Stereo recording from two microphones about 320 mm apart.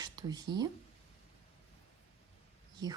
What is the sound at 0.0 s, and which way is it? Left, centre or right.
Speech, centre.